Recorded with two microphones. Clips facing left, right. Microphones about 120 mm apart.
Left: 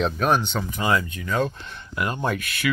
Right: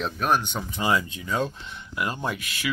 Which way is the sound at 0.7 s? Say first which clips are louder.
Left 1 dB; 25° right (ahead or behind).